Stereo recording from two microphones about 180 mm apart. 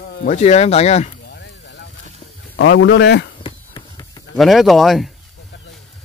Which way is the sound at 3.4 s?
20° left (ahead or behind).